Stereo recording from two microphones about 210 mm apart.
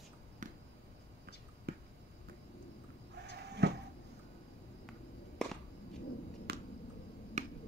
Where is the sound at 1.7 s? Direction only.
50° right (ahead or behind).